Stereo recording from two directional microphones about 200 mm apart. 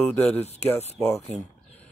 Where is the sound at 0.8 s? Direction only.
35° left (ahead or behind).